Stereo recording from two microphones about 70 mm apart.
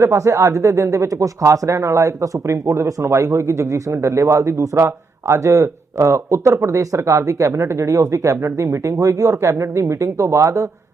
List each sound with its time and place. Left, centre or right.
0.0 s speech: right